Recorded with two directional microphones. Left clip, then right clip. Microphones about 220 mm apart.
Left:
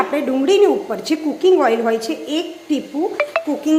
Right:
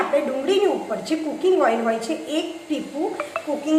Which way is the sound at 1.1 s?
40° left (ahead or behind).